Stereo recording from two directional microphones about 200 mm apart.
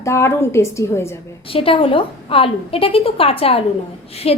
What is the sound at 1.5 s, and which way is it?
A woman's voice, 25° left (ahead or behind).